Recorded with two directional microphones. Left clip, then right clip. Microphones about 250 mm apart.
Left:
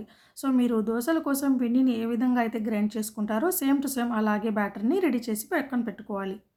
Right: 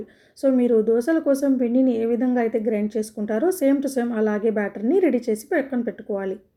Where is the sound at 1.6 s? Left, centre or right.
Centre.